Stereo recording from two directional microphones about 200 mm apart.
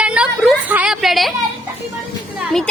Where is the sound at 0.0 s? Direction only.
5° right (ahead or behind).